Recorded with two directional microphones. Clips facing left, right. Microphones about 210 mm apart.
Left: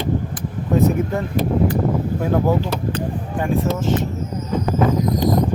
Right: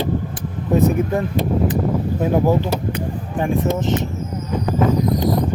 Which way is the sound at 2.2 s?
15° right (ahead or behind).